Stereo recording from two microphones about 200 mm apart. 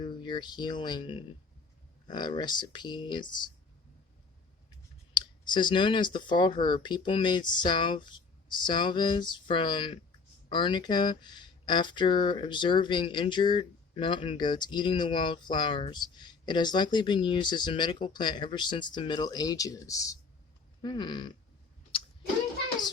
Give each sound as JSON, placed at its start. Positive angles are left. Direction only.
{"t": 0.0, "sound": "speech", "side_deg": 25}
{"t": 5.5, "sound": "speech", "side_deg": 25}